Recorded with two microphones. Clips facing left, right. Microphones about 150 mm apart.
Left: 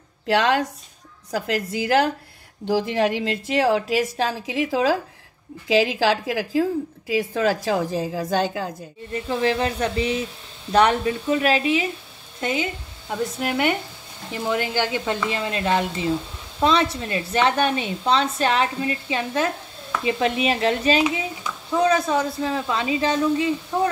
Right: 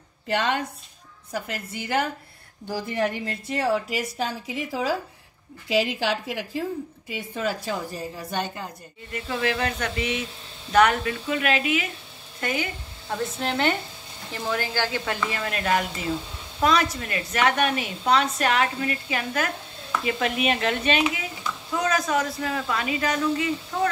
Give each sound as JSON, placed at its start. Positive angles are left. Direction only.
{"t": 0.3, "sound": "a woman's voice", "side_deg": 90}
{"t": 9.1, "sound": "a woman's voice", "side_deg": 30}
{"t": 12.4, "sound": "a woman's voice", "side_deg": 20}